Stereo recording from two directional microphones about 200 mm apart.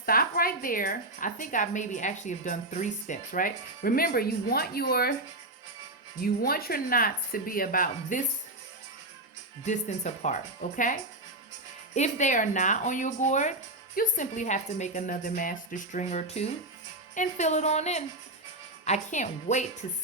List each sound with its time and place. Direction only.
0.0 s a woman's voice: 45° left (ahead or behind)
6.2 s a woman's voice: 45° left (ahead or behind)
9.6 s a woman's voice: 35° left (ahead or behind)
11.9 s a woman's voice: 35° left (ahead or behind)